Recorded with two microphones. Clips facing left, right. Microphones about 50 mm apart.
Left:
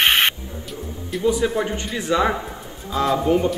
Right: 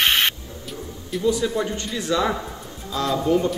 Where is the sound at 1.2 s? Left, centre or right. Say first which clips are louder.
Left 2 dB; left.